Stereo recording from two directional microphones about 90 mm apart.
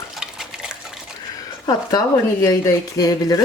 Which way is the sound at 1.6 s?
45° left (ahead or behind).